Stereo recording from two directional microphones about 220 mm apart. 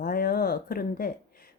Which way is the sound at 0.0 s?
45° left (ahead or behind).